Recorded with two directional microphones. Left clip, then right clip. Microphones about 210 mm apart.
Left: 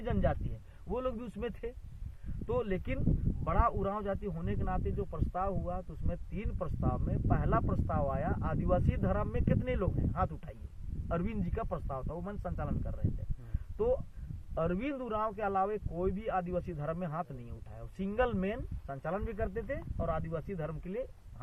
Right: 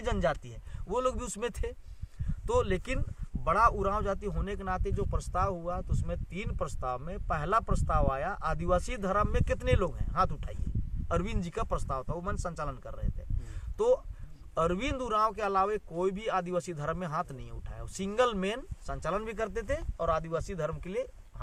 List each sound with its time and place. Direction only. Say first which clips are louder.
0.0 s speech: right 4 dB; 30° right (ahead or behind)